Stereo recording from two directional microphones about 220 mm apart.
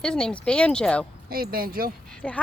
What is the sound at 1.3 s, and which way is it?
Speech, 40° right (ahead or behind).